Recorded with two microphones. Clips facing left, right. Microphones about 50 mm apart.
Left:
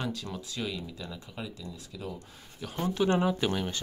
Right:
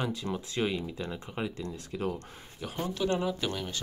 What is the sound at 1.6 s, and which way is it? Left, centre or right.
Speech, right.